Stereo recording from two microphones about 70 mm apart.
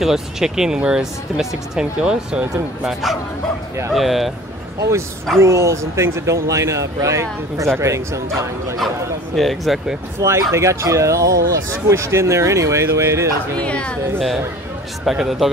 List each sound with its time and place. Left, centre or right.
0.0 s speech: centre
2.8 s speech: centre
5.4 s speech: right
9.4 s speech: centre
10.2 s speech: right
13.6 s speech: centre
15.0 s speech: centre